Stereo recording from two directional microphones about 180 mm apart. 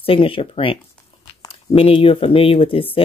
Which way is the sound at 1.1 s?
30° left (ahead or behind).